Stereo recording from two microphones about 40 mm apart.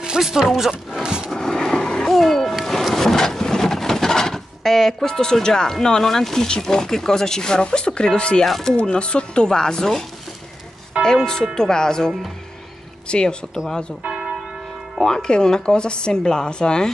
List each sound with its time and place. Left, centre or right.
0.2 s speech: centre
1.0 s a sound: centre
1.3 s vehicle: centre
2.1 s music: centre
2.9 s speech: centre; by 8.5 s left
8.5 s speech: centre
8.7 s speech: left
13.1 s speech: left
14.0 s church bell: centre
15.0 s speech: centre